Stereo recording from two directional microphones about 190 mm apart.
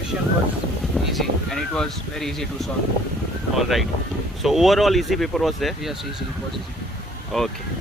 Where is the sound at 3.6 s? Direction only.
Centre (ahead or behind).